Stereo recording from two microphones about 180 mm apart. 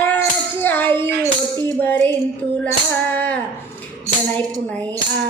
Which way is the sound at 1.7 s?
10° left (ahead or behind).